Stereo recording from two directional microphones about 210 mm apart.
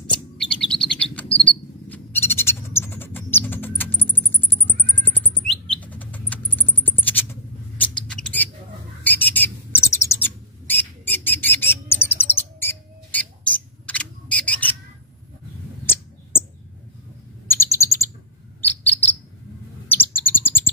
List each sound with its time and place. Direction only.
0.0 s chirp: 5° left (ahead or behind)
1.5 s a sound: 10° left (ahead or behind)
7.9 s rodents: 5° left (ahead or behind)
9.0 s bird: 10° left (ahead or behind)
13.8 s a sound: 5° left (ahead or behind)
17.5 s bird: 10° left (ahead or behind)
18.7 s cricket: 10° left (ahead or behind)
19.9 s chirp: 10° left (ahead or behind)